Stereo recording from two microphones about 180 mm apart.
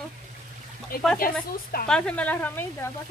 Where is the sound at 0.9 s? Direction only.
55° left (ahead or behind).